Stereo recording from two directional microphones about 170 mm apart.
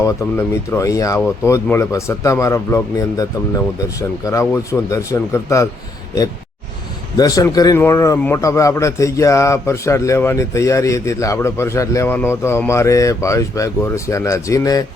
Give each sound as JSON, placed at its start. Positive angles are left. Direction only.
{"t": 0.0, "sound": "a man's voice", "side_deg": 15}
{"t": 7.2, "sound": "a man's voice", "side_deg": 20}